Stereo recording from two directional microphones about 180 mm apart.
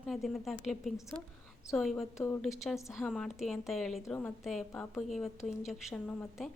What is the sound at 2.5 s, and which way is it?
A woman's voice, centre (ahead or behind).